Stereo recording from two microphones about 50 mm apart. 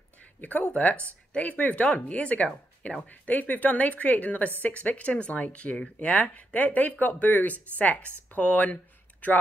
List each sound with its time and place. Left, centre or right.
0.4 s a woman's voice: left
3.0 s a woman's voice: left